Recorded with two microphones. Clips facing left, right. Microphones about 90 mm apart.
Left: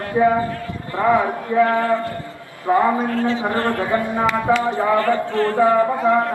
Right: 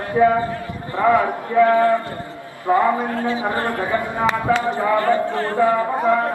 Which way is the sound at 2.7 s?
20° left (ahead or behind).